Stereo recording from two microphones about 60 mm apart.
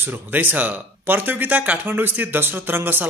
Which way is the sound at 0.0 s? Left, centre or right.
Right.